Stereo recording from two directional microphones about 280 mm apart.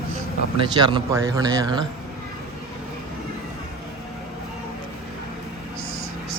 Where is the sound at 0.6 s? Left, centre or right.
Centre.